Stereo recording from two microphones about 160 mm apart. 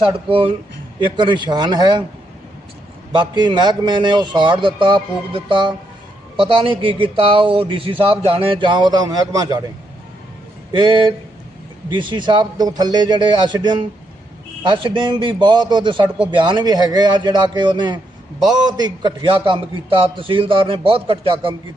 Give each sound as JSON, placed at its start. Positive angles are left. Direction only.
{"t": 0.3, "sound": "speech", "side_deg": -35}
{"t": 3.1, "sound": "speech", "side_deg": -30}
{"t": 10.7, "sound": "speech", "side_deg": -30}